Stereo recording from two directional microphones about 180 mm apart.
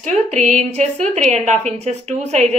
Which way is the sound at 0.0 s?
40° right (ahead or behind).